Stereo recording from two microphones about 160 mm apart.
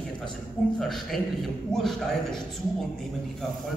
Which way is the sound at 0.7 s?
Centre (ahead or behind).